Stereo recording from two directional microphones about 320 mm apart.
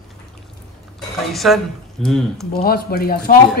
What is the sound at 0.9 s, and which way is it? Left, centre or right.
Speech, centre.